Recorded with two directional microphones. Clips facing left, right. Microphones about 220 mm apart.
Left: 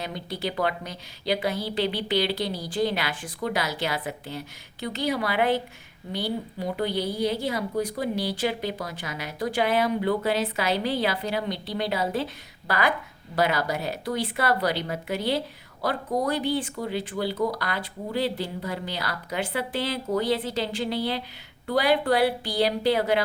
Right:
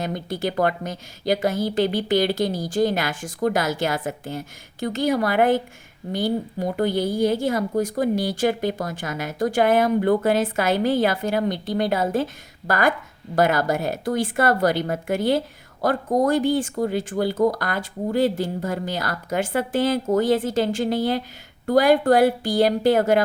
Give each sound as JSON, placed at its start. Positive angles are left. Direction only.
{"t": 0.0, "sound": "speech", "side_deg": -45}